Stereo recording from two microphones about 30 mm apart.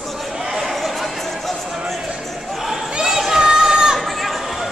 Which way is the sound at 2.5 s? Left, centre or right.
Centre.